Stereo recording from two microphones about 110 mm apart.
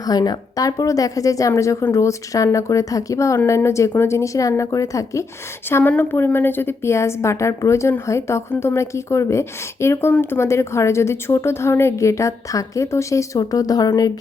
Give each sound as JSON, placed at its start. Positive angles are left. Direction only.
{"t": 0.0, "sound": "a woman's voice", "side_deg": 35}